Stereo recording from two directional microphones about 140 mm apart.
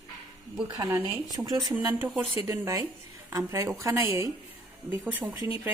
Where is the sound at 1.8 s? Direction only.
15° right (ahead or behind).